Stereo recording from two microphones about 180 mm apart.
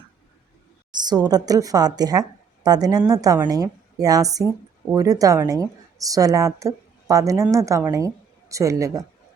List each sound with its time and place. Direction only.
1.0 s a woman's voice: 20° right (ahead or behind)